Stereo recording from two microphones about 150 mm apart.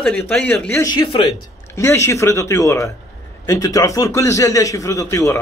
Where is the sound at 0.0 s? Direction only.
5° left (ahead or behind).